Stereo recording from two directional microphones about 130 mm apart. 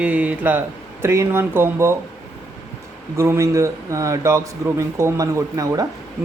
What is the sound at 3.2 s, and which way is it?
A man's voice, 20° right (ahead or behind).